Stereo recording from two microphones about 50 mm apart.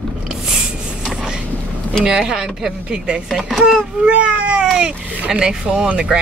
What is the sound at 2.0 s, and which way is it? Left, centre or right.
Speech, centre.